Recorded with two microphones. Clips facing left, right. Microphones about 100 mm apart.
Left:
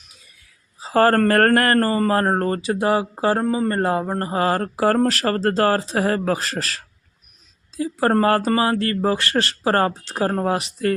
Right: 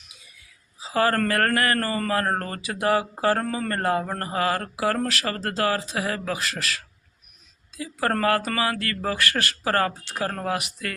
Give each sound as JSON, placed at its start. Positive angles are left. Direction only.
{"t": 0.8, "sound": "speech", "side_deg": 45}